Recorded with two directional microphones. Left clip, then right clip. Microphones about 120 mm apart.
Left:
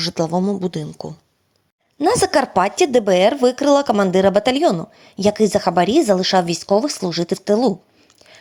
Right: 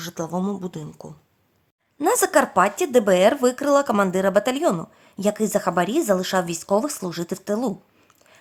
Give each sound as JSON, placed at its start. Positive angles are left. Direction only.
{"t": 0.0, "sound": "a woman's voice", "side_deg": 25}
{"t": 2.0, "sound": "a woman's voice", "side_deg": 30}
{"t": 8.2, "sound": "a sound", "side_deg": 25}